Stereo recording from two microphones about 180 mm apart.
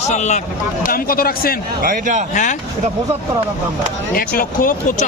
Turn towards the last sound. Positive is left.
turn(degrees=50)  # may be behind; listen again after turning